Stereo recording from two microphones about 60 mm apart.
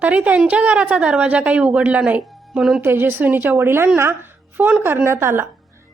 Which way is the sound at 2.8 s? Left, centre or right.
Right.